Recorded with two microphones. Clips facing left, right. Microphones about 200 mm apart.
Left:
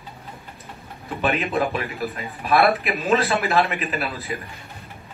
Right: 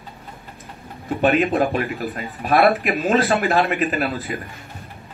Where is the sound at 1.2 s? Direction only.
45° right (ahead or behind).